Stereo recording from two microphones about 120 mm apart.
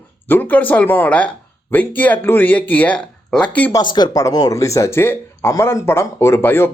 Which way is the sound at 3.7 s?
40° left (ahead or behind).